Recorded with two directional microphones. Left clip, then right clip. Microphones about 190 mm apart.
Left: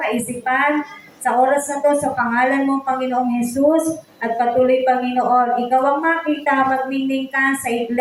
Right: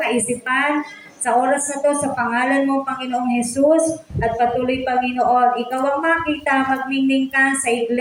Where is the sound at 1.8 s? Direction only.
20° right (ahead or behind).